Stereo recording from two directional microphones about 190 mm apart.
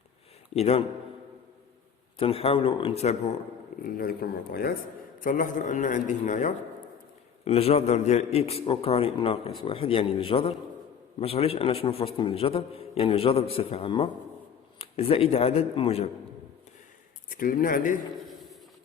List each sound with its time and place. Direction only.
0.5 s a man's voice: 30° left (ahead or behind)
2.1 s a man's voice: 30° left (ahead or behind)
3.8 s a man's voice: 50° left (ahead or behind); by 16.0 s 30° left (ahead or behind)
17.2 s a man's voice: 45° left (ahead or behind)